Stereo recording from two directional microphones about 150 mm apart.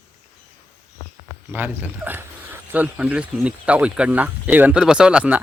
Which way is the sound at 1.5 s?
10° right (ahead or behind).